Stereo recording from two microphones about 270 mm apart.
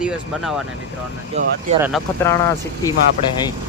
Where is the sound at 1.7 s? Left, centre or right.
Right.